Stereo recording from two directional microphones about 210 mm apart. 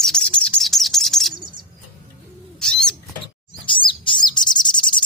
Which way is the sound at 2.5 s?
5° left (ahead or behind).